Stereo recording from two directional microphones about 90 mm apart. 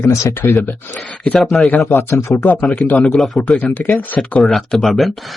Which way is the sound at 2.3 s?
20° left (ahead or behind).